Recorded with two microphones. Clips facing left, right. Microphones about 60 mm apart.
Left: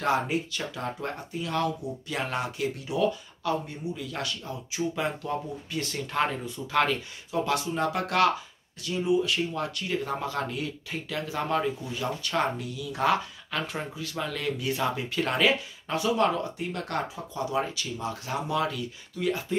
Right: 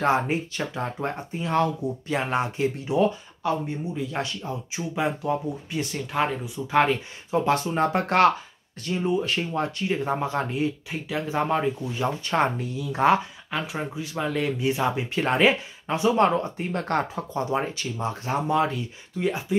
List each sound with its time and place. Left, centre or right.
0.0 s speech: right; by 6.6 s centre
6.7 s speech: right
13.5 s speech: centre